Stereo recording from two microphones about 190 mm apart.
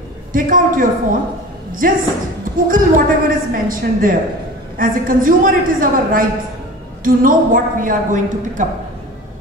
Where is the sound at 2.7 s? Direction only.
45° right (ahead or behind).